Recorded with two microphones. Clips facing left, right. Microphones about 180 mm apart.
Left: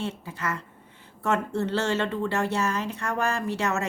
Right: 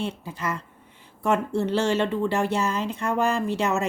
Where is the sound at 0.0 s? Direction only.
15° right (ahead or behind).